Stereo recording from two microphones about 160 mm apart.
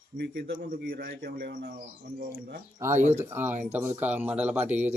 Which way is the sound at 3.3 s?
15° right (ahead or behind).